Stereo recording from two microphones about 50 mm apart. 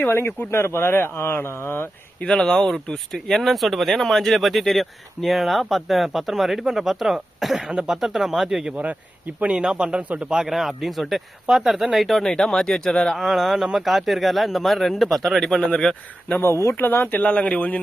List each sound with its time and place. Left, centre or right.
0.1 s speech: left
2.2 s speech: centre
7.7 s speech: centre
8.0 s speech: centre
8.7 s speech: right
9.5 s speech: centre
10.3 s speech: centre
13.1 s speech: centre
16.7 s a man's voice: left